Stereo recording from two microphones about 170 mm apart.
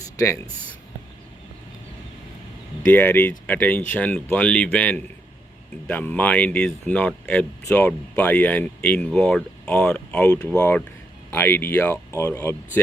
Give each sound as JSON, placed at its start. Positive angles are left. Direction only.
{"t": 2.8, "sound": "speech", "side_deg": 10}